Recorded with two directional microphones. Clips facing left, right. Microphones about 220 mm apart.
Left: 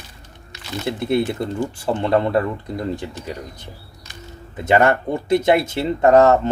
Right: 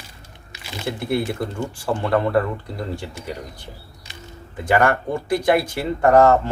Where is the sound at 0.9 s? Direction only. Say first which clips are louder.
Left 3 dB; 20° left (ahead or behind).